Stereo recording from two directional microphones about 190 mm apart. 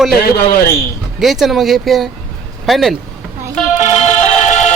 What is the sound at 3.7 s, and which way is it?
Music, 35° left (ahead or behind).